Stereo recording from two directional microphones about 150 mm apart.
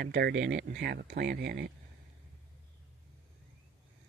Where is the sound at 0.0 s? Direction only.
90° right.